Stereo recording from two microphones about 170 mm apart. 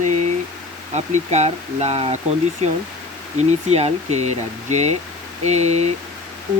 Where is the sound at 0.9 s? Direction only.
40° right (ahead or behind).